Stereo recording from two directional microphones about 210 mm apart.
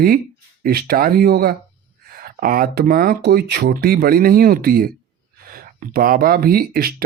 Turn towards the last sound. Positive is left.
turn(degrees=-45)  # may be behind; listen again after turning